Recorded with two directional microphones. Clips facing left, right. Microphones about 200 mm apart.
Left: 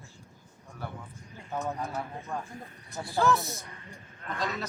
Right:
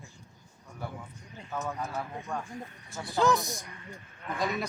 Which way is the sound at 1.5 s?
20° left (ahead or behind).